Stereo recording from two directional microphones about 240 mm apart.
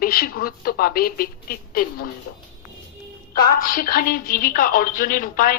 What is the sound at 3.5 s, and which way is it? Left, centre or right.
Speech, left.